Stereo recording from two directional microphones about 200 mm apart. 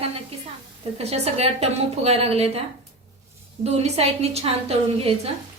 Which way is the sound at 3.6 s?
30° right (ahead or behind).